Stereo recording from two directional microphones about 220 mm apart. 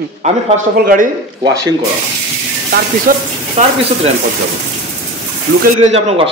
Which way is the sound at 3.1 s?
40° right (ahead or behind).